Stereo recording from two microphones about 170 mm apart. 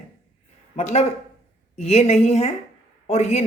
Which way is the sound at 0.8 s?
40° left (ahead or behind).